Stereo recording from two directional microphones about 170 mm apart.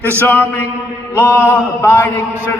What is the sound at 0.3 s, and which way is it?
A man's voice, 15° left (ahead or behind).